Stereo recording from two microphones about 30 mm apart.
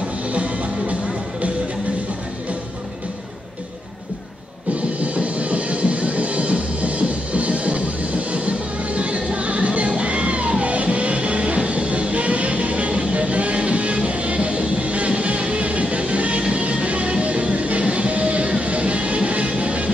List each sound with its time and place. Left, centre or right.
0.3 s music: right
5.0 s music: right